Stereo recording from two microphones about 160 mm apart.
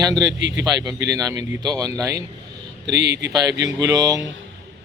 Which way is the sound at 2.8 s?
90° right.